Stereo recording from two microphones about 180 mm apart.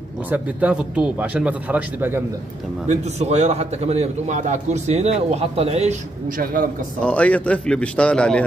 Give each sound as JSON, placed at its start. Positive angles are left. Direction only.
{"t": 0.3, "sound": "speech", "side_deg": -5}
{"t": 2.9, "sound": "a man's voice", "side_deg": -40}
{"t": 7.0, "sound": "a man's voice", "side_deg": 5}